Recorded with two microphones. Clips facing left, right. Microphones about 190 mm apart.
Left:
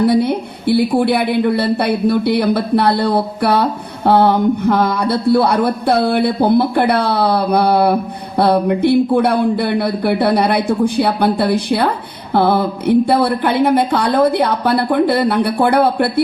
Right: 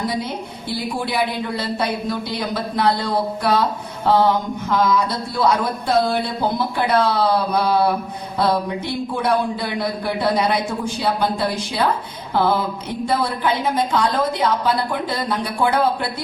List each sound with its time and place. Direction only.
0.0 s a woman's voice: 60° left (ahead or behind)